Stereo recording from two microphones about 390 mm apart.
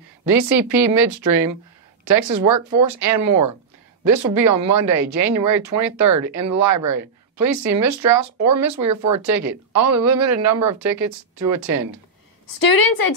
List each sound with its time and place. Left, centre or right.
0.2 s speech: centre
0.9 s speech: right
12.5 s a woman's voice: left